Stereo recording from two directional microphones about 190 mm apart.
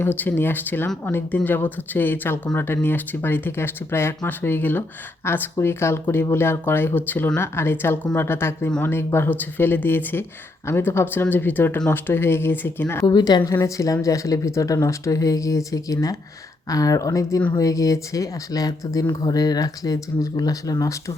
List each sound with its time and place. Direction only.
0.0 s speech: 10° left (ahead or behind)